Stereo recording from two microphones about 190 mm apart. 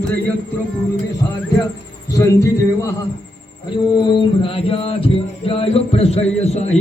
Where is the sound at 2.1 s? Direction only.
15° left (ahead or behind).